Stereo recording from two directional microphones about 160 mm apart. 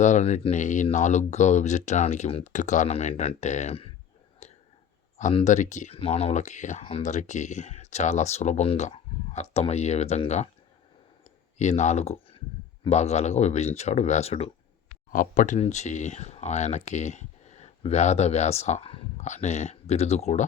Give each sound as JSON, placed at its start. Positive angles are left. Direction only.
{"t": 0.0, "sound": "speech", "side_deg": 45}
{"t": 4.4, "sound": "a sound", "side_deg": 40}
{"t": 5.3, "sound": "speech", "side_deg": 40}
{"t": 11.5, "sound": "speech", "side_deg": 45}
{"t": 15.1, "sound": "speech", "side_deg": 55}